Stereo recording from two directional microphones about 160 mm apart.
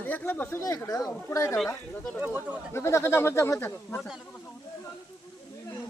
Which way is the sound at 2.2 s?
10° right (ahead or behind).